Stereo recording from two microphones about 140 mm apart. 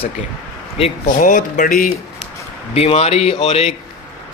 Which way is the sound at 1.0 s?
65° left (ahead or behind).